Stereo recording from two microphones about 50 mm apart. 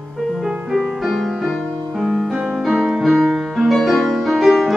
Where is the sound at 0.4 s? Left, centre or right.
Centre.